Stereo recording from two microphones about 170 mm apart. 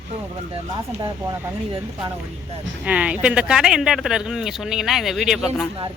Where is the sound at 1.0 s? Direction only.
15° right (ahead or behind).